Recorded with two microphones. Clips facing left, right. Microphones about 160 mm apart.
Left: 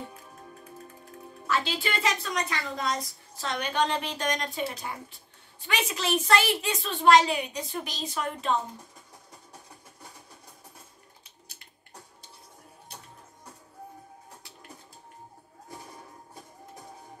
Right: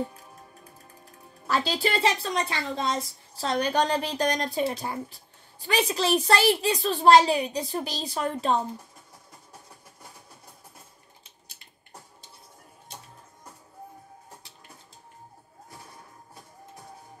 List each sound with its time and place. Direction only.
1.5 s a woman's voice: 35° right (ahead or behind)